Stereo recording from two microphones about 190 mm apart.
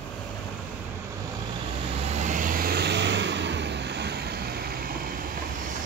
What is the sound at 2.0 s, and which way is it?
Vehicle, 40° right (ahead or behind).